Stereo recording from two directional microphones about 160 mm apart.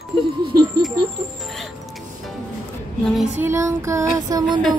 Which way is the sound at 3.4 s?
15° right (ahead or behind).